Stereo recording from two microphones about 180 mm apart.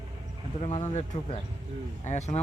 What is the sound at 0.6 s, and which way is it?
Speech, 35° left (ahead or behind).